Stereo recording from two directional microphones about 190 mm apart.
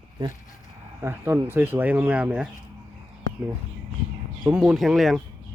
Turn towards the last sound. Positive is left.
turn(degrees=0)  # may be behind; listen again after turning